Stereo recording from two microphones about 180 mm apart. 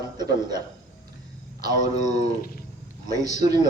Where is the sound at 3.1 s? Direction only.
20° right (ahead or behind).